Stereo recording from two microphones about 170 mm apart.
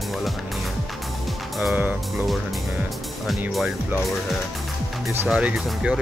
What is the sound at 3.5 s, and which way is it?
Speech, centre (ahead or behind).